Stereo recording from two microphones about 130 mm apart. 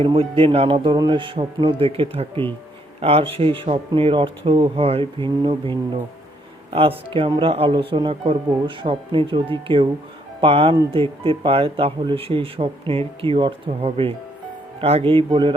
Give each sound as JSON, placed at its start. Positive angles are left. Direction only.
{"t": 0.0, "sound": "a man's voice", "side_deg": -45}